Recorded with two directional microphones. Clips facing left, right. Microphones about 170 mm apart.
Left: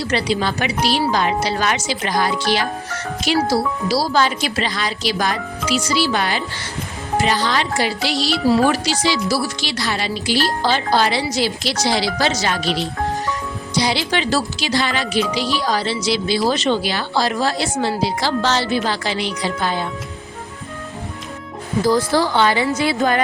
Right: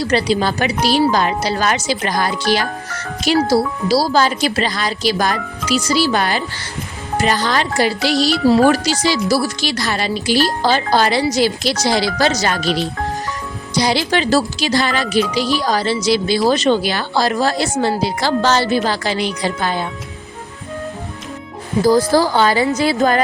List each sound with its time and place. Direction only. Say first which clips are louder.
0.1 s a woman's voice: right 3 dB; 35° right (ahead or behind)
13.7 s a woman's voice: right 3 dB; 45° right (ahead or behind)
21.8 s speech: right 4 dB; 40° right (ahead or behind)